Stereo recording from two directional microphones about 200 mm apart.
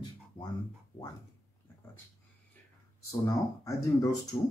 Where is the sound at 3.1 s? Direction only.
15° left (ahead or behind).